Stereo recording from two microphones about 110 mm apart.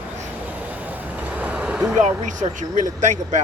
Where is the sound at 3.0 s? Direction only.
90° right.